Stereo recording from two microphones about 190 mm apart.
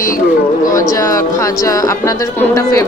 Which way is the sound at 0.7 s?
15° left (ahead or behind).